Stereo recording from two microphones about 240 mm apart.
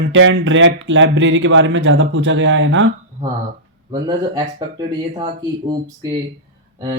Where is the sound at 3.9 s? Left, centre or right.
Centre.